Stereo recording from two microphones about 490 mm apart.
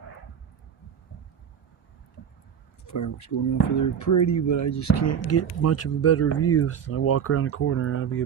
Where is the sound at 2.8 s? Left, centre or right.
Left.